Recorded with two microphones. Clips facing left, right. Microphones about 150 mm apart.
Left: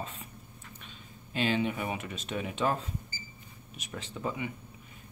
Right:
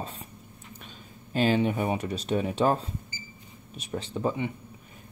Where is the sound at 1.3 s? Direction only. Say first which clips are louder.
Right 5 dB; 40° right (ahead or behind).